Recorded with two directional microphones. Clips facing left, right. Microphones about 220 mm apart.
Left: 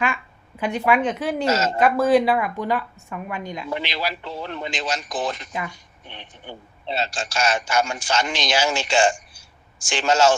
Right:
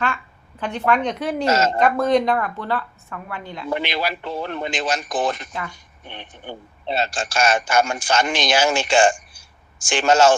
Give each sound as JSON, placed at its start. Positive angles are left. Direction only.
{"t": 0.6, "sound": "a woman's voice", "side_deg": 10}
{"t": 1.5, "sound": "a man's voice", "side_deg": -50}
{"t": 1.8, "sound": "a woman's voice", "side_deg": 5}
{"t": 3.7, "sound": "a man's voice", "side_deg": -55}